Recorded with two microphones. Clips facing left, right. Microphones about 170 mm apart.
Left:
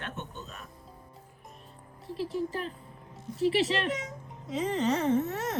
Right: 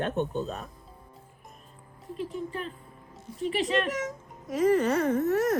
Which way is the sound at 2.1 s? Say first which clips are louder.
Left 2 dB; 35° left (ahead or behind).